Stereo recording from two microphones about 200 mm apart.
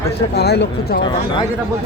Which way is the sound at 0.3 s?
55° left (ahead or behind).